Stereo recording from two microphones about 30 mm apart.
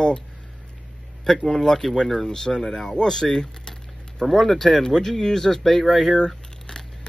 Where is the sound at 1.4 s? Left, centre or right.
Centre.